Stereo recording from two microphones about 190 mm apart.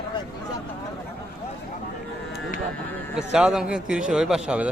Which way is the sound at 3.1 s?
5° right (ahead or behind).